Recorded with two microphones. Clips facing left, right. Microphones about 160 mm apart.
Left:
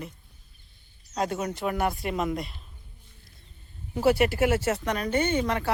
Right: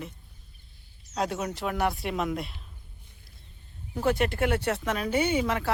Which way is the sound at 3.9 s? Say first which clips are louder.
Left 4 dB; 5° left (ahead or behind).